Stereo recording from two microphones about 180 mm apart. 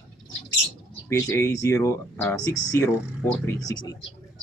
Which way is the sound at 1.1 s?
15° left (ahead or behind).